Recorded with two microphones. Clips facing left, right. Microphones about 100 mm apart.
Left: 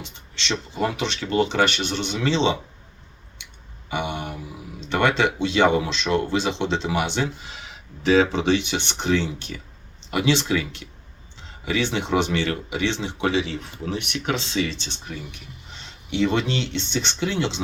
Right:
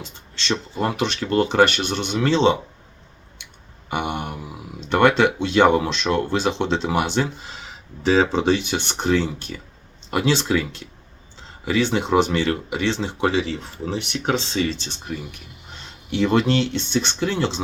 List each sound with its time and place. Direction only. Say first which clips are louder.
0.0 s speech: right 1 dB; 40° right (ahead or behind)
3.8 s a sound: right 2 dB; 50° right (ahead or behind)
4.9 s speech: right 4 dB; 50° right (ahead or behind)